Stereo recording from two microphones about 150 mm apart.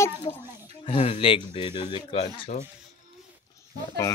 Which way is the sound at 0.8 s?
40° left (ahead or behind).